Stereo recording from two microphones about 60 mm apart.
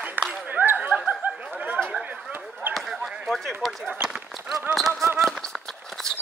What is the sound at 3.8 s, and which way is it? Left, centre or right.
Run, centre.